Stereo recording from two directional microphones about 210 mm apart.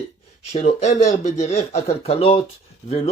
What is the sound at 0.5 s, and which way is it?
Speech, 35° left (ahead or behind).